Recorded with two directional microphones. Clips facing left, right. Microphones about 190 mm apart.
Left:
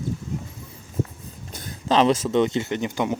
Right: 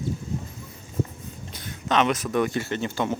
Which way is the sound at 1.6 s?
35° left (ahead or behind).